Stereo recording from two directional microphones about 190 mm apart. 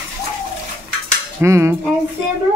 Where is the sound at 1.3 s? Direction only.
15° right (ahead or behind).